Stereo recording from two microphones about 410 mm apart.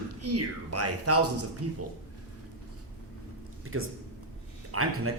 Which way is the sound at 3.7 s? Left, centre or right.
Right.